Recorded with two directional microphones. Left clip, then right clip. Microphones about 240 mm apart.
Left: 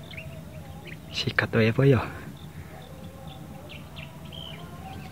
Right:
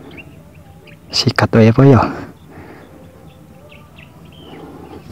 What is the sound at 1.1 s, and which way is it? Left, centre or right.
Speech, right.